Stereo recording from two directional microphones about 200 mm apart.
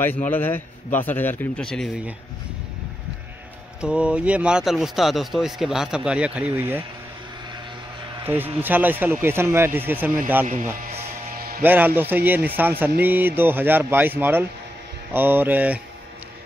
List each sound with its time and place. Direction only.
0.3 s a man's voice: 10° left (ahead or behind)
3.8 s speech: 5° right (ahead or behind)
8.2 s speech: 10° right (ahead or behind)
10.4 s music: 40° right (ahead or behind)
11.6 s speech: 10° right (ahead or behind)